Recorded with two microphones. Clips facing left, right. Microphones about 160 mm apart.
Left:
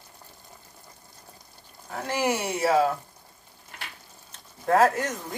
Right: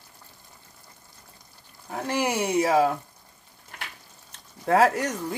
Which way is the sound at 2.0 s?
15° right (ahead or behind).